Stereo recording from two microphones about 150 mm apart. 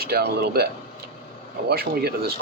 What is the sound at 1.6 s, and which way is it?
Speech, 90° right.